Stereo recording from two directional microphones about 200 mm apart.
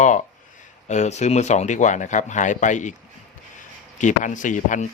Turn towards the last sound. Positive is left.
turn(degrees=40)  # may be behind; listen again after turning